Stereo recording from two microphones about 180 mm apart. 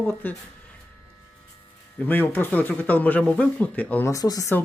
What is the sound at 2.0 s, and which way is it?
Speech, 10° left (ahead or behind).